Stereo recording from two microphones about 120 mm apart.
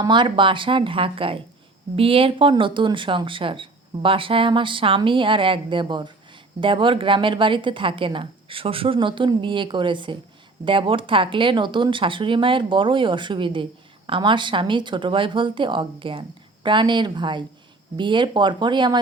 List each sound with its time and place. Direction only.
0.0 s speech: 40° right (ahead or behind)